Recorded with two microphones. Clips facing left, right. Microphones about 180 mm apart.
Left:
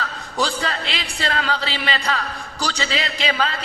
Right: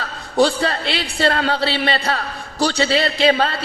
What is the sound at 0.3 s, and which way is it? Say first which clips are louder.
A man's voice: right 7 dB; 35° right (ahead or behind).